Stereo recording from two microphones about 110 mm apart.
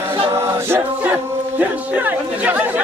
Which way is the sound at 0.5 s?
20° right (ahead or behind).